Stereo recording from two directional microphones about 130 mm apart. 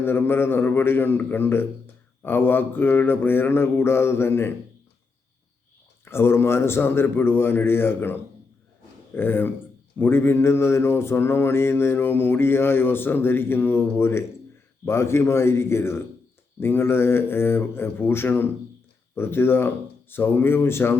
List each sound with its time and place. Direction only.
0.0 s mantra: 15° left (ahead or behind)
6.1 s mantra: 20° left (ahead or behind)
14.8 s a man's voice: 20° left (ahead or behind)
16.6 s mantra: 20° left (ahead or behind)